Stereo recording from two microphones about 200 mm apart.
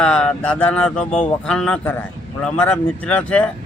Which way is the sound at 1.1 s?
35° left (ahead or behind).